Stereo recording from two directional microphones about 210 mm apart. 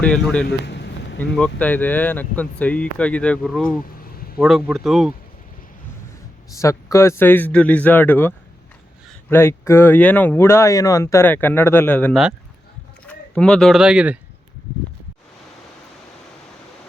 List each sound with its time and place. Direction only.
0.0 s speech: 5° left (ahead or behind)
0.4 s a sound: 55° left (ahead or behind)
1.2 s speech: 5° left (ahead or behind)
3.9 s a sound: 45° left (ahead or behind)
4.4 s speech: centre (ahead or behind)
6.6 s speech: 15° left (ahead or behind)
9.3 s speech: 10° left (ahead or behind); by 14.2 s 5° right (ahead or behind)